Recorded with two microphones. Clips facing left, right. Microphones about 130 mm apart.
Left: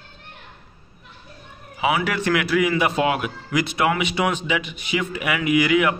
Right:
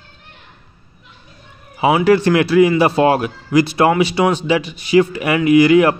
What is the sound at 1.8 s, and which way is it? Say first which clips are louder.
Speech: right 9 dB; 30° right (ahead or behind).